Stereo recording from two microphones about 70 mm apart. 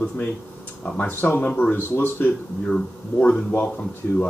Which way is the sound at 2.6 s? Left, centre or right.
Centre.